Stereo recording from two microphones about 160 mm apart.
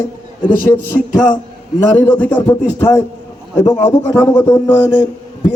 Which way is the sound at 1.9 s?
15° left (ahead or behind).